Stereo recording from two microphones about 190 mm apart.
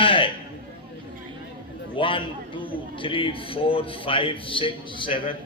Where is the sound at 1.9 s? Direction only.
25° left (ahead or behind).